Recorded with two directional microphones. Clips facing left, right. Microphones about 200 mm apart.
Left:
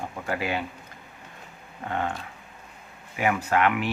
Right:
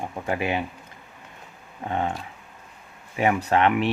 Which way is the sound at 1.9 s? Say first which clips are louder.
Right 2 dB; 20° right (ahead or behind).